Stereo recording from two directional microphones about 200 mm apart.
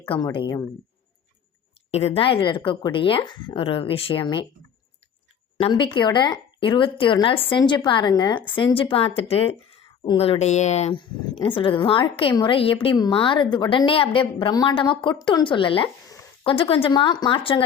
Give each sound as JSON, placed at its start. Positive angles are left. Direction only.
{"t": 0.3, "sound": "speech", "side_deg": 20}
{"t": 1.9, "sound": "speech", "side_deg": 30}
{"t": 5.5, "sound": "speech", "side_deg": 25}